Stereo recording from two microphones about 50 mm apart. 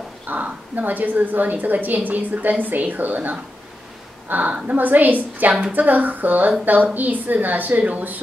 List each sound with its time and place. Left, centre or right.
0.3 s a woman's voice: right